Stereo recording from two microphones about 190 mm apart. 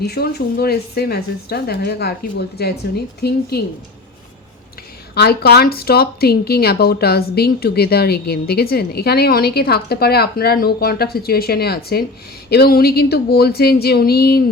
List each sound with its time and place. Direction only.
0.0 s a woman's voice: 55° left (ahead or behind)
5.1 s a woman's voice: 55° left (ahead or behind)